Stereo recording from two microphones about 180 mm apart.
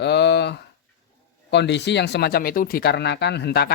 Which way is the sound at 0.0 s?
70° left (ahead or behind).